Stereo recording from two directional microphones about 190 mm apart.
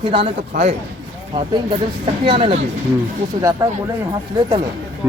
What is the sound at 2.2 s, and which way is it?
Speech, 30° right (ahead or behind).